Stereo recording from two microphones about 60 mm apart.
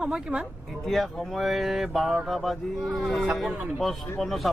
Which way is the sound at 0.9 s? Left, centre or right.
Centre.